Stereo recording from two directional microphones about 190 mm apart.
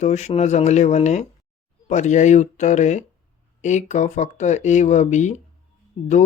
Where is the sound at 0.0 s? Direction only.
35° left (ahead or behind).